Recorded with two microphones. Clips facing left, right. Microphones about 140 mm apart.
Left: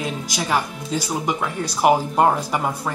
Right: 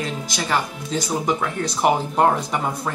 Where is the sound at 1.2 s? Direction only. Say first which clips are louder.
Right 1 dB; 5° left (ahead or behind).